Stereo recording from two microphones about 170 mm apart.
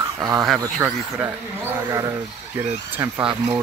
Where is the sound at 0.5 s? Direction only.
Centre (ahead or behind).